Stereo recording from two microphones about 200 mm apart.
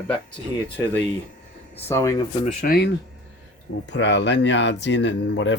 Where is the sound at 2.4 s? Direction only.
45° left (ahead or behind).